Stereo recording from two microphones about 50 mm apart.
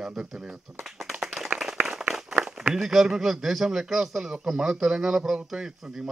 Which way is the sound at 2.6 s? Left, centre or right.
Centre.